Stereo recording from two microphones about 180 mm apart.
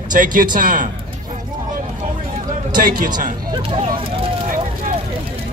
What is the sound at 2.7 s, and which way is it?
Speech, 50° right (ahead or behind).